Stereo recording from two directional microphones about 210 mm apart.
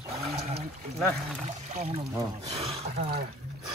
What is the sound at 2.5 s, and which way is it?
Speech, 30° right (ahead or behind).